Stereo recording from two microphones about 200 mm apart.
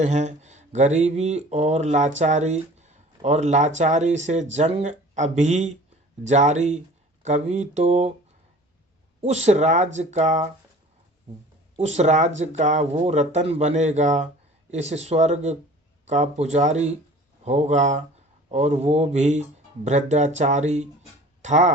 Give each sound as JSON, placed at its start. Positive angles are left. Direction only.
{"t": 0.0, "sound": "speech", "side_deg": -35}
{"t": 9.2, "sound": "speech", "side_deg": -35}
{"t": 11.8, "sound": "speech", "side_deg": -35}